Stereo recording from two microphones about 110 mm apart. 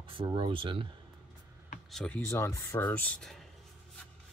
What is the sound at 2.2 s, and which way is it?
Speech, 25° left (ahead or behind).